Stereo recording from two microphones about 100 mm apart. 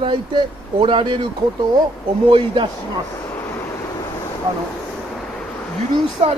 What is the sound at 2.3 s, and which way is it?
Speech, 60° right (ahead or behind).